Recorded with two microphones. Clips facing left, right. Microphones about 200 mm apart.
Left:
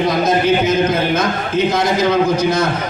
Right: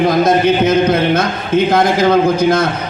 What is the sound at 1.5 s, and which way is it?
A man's voice, 55° right (ahead or behind).